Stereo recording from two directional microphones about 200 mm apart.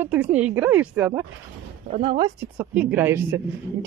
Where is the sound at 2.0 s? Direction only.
20° right (ahead or behind).